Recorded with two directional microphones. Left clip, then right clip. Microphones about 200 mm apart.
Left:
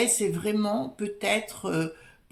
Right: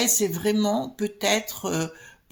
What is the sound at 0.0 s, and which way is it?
A woman's voice, 35° right (ahead or behind).